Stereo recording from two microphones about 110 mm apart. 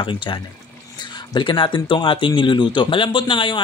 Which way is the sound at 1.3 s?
45° left (ahead or behind).